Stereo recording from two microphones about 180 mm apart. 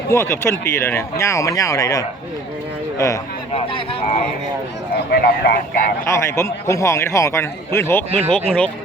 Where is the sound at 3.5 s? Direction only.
30° left (ahead or behind).